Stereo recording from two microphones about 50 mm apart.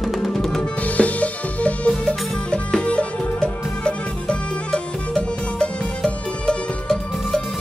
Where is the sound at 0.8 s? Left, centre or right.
Left.